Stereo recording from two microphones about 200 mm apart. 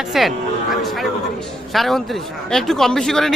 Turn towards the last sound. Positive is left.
turn(degrees=0)  # may be behind; listen again after turning